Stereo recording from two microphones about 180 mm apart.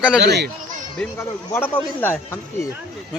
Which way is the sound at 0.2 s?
65° right (ahead or behind).